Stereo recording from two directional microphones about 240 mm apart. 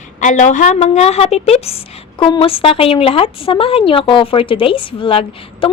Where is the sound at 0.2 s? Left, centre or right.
Left.